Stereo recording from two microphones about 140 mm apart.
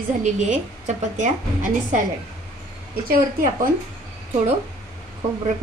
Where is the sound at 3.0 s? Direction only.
90° right.